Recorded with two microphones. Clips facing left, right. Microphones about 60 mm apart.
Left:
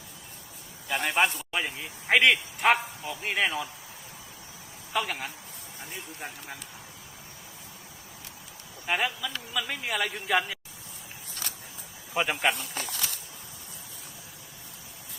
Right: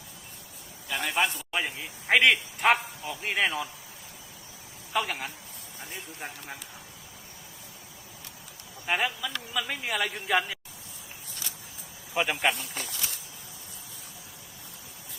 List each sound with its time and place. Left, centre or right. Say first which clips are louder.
1.0 s speech: left 2 dB; left
1.5 s a man's voice: even; centre
4.9 s a man's voice: right 1 dB; centre
8.9 s a man's voice: even; centre
12.1 s a man's voice: even; centre
12.7 s speech: left 2 dB; left